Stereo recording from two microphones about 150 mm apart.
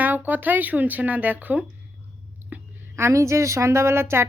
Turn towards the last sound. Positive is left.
turn(degrees=-15)  # may be behind; listen again after turning